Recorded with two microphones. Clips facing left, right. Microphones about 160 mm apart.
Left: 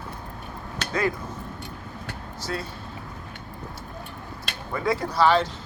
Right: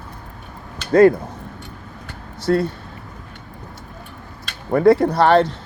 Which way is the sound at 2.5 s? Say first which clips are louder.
Right 14 dB; 55° right (ahead or behind).